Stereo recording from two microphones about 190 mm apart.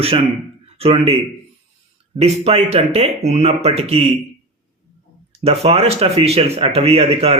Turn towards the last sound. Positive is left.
turn(degrees=-30)  # may be behind; listen again after turning